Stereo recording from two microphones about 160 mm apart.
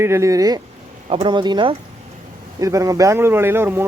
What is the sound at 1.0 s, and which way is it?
A man's voice, 35° right (ahead or behind).